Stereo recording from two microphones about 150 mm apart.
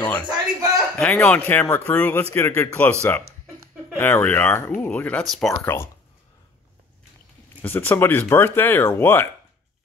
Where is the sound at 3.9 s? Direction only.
15° left (ahead or behind).